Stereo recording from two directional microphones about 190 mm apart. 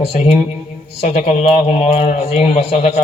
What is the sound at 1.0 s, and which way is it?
A man's voice, 35° left (ahead or behind).